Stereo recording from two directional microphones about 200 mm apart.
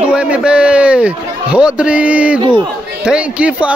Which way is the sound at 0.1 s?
5° right (ahead or behind).